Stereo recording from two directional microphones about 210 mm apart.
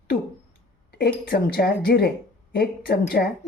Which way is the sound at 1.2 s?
45° left (ahead or behind).